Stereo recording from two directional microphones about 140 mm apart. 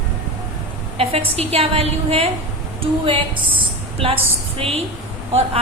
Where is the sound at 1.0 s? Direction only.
45° right (ahead or behind).